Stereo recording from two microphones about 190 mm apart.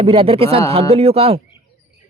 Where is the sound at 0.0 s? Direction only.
30° right (ahead or behind).